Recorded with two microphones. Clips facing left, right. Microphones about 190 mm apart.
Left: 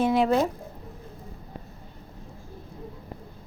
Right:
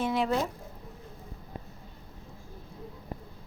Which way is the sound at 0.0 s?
80° left.